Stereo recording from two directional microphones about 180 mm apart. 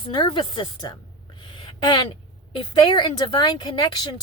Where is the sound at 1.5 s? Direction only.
25° left (ahead or behind).